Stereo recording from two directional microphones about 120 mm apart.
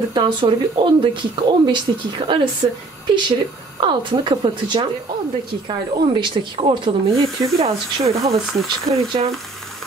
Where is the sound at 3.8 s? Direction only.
40° right (ahead or behind).